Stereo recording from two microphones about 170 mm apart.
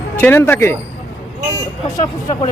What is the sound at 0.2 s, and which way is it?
Speech, 15° left (ahead or behind).